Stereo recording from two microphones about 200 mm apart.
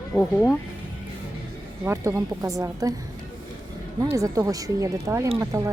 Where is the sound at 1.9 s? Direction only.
15° right (ahead or behind).